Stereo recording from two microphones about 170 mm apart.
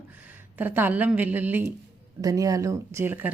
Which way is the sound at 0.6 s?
10° right (ahead or behind).